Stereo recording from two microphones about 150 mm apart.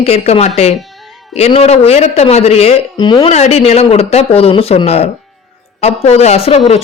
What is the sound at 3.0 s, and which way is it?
Speech, 30° left (ahead or behind).